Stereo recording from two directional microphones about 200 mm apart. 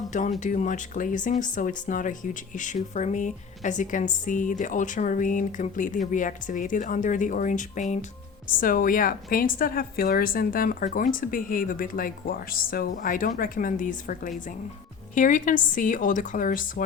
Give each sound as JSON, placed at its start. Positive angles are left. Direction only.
{"t": 0.1, "sound": "a woman's voice", "side_deg": 40}